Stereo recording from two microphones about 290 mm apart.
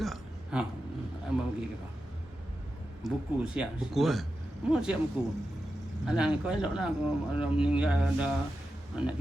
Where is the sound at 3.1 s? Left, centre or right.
Centre.